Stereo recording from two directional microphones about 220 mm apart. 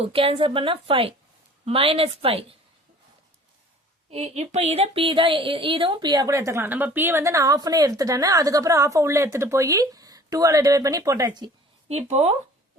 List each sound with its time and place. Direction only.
0.0 s a woman's voice: 25° right (ahead or behind)
4.1 s speech: 30° right (ahead or behind)